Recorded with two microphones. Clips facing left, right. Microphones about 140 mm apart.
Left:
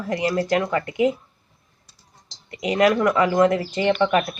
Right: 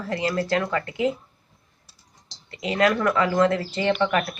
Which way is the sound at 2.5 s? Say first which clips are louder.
Left 3 dB; 15° left (ahead or behind).